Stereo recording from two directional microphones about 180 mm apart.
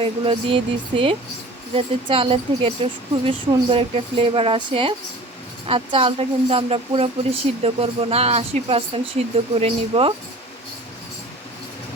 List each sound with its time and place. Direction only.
0.0 s speech: 30° right (ahead or behind)